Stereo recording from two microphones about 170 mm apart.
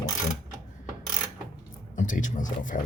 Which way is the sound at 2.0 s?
50° left (ahead or behind).